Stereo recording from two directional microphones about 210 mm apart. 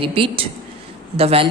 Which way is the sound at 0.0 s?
25° right (ahead or behind).